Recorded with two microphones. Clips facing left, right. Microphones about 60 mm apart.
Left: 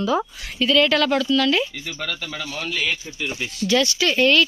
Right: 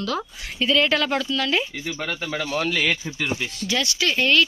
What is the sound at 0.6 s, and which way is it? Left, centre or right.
Speech, centre.